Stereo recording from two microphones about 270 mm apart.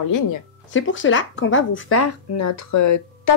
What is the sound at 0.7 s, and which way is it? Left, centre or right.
Speech, left.